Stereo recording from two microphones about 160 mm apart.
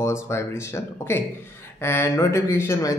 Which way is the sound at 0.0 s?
15° left (ahead or behind).